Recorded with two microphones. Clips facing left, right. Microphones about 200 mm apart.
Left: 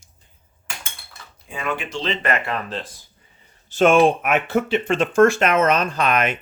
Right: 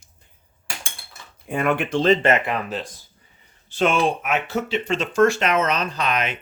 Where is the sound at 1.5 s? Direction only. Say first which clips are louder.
Right 6 dB; 55° right (ahead or behind).